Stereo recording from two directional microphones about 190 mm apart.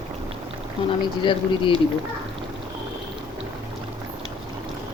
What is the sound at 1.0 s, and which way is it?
Speech, 25° left (ahead or behind).